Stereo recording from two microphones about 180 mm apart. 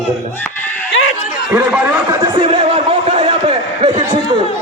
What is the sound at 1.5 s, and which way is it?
Speech, 10° right (ahead or behind).